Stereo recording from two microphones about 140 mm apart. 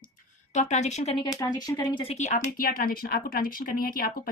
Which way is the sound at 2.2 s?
70° left (ahead or behind).